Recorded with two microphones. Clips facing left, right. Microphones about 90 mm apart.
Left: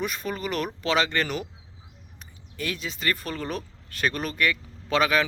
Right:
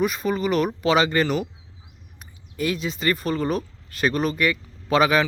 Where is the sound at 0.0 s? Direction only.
5° right (ahead or behind).